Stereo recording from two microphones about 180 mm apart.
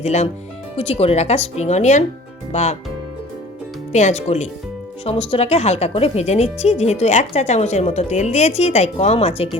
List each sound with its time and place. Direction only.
0.0 s speech: 40° left (ahead or behind)
3.9 s speech: 40° left (ahead or behind)